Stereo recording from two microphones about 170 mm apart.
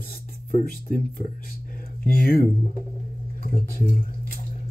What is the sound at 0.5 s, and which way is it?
Speech, 55° left (ahead or behind).